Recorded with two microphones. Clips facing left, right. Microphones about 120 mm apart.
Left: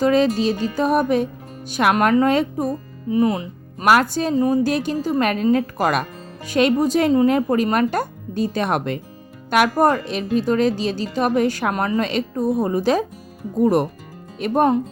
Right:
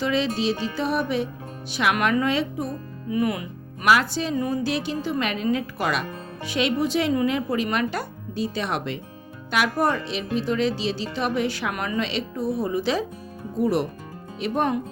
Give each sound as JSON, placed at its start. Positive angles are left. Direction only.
{"t": 0.0, "sound": "a woman's voice", "side_deg": 45}
{"t": 3.1, "sound": "speech", "side_deg": 30}
{"t": 3.8, "sound": "a woman's voice", "side_deg": 45}